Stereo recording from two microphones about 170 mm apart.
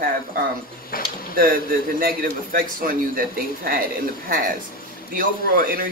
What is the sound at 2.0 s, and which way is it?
Speech, 60° right (ahead or behind).